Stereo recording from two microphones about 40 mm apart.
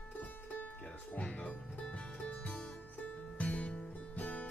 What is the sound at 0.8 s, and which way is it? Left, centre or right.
Music, left.